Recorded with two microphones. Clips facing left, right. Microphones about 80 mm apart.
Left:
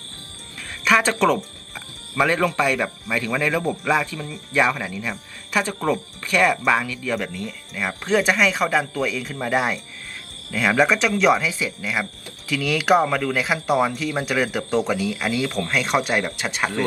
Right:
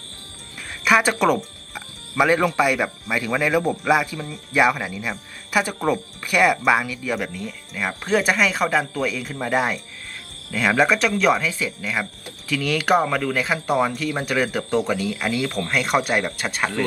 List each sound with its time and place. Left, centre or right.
0.9 s speech: centre